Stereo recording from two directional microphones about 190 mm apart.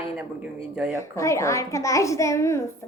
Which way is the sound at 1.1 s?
15° left (ahead or behind).